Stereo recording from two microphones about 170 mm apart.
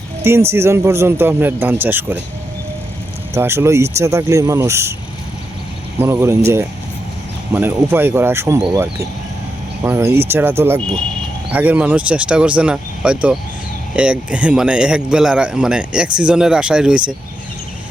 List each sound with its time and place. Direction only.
0.3 s speech: 15° right (ahead or behind)
3.3 s speech: 15° right (ahead or behind)
6.0 s speech: 15° right (ahead or behind)
11.5 s a man's voice: 10° right (ahead or behind)